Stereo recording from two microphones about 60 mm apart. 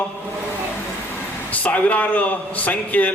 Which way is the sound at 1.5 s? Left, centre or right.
Left.